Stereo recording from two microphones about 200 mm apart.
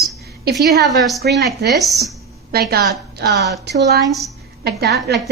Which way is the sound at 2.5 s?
50° right (ahead or behind).